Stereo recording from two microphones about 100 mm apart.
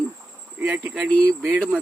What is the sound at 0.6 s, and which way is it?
Speech, 20° right (ahead or behind).